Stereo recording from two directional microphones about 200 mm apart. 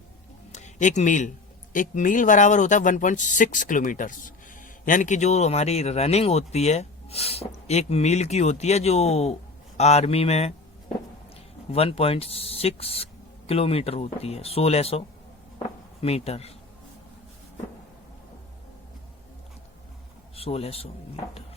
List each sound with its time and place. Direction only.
0.5 s speech: 35° left (ahead or behind)
11.7 s speech: 30° left (ahead or behind)
20.3 s a man's voice: 30° left (ahead or behind)